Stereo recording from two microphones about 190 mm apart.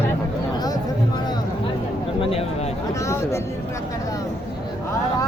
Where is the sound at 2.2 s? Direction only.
30° left (ahead or behind).